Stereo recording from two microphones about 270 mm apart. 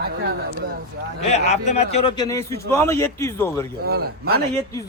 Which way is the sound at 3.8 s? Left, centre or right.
Right.